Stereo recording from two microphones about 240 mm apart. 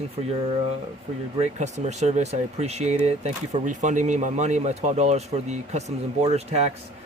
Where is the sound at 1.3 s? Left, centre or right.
Right.